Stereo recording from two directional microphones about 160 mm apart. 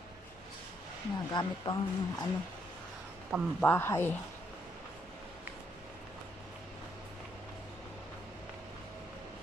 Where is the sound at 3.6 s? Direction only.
10° left (ahead or behind).